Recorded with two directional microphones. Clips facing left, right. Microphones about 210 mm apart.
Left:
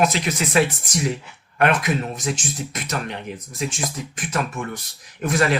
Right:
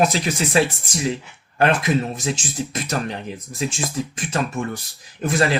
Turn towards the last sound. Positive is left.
turn(degrees=-30)  # may be behind; listen again after turning